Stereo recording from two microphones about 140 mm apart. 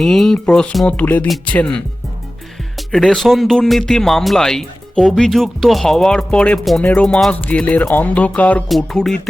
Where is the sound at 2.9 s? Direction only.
5° left (ahead or behind).